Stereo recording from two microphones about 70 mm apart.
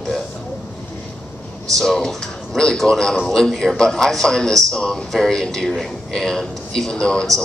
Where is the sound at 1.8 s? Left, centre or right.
Centre.